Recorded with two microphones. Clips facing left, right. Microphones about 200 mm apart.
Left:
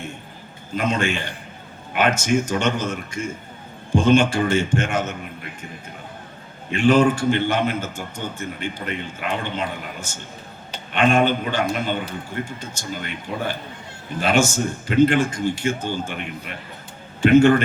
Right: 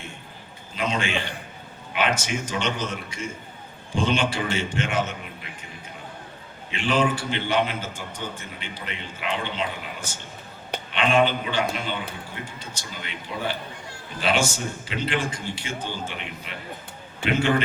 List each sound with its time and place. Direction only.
0.8 s a man's voice: 45° left (ahead or behind)
6.7 s a man's voice: 45° left (ahead or behind)
10.9 s a man's voice: 45° left (ahead or behind)